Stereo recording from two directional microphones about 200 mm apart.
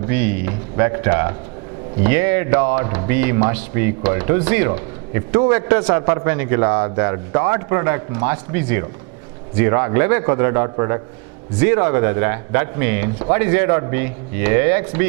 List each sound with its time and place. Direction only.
0.1 s speech: 10° right (ahead or behind)